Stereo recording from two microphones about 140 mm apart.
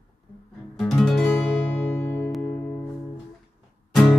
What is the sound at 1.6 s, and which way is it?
Music, 15° left (ahead or behind).